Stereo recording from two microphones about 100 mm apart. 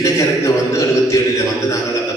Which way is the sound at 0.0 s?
30° left (ahead or behind).